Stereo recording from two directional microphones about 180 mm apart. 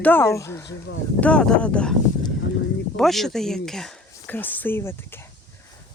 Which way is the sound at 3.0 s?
Centre (ahead or behind).